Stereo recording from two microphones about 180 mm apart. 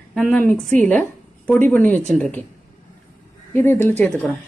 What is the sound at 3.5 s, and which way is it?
Speech, 15° left (ahead or behind).